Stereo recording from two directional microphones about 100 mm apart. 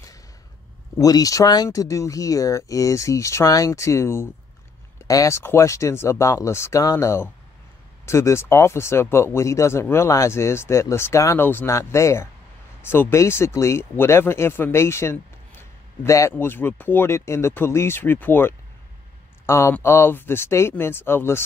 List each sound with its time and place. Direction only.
0.9 s speech: 35° left (ahead or behind)